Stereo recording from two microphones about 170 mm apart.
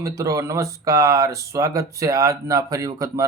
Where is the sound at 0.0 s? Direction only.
20° right (ahead or behind).